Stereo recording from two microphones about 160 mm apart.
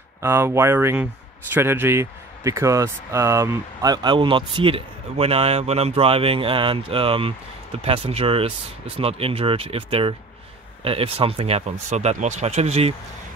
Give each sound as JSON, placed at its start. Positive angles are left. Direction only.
{"t": 0.2, "sound": "speech", "side_deg": -15}